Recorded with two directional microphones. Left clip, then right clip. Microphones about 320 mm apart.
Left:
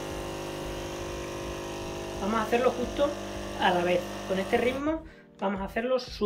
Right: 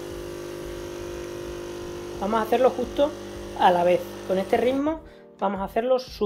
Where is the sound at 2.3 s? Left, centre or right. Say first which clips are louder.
Right 5 dB; centre.